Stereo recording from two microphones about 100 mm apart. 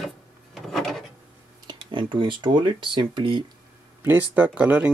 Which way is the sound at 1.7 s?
55° right (ahead or behind).